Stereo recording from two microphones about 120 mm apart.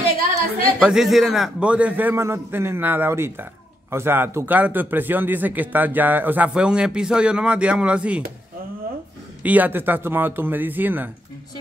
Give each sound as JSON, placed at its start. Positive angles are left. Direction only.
{"t": 0.7, "sound": "speech", "side_deg": -5}
{"t": 9.4, "sound": "speech", "side_deg": -15}